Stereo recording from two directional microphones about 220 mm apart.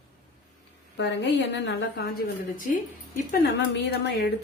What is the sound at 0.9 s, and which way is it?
A woman's voice, 50° left (ahead or behind).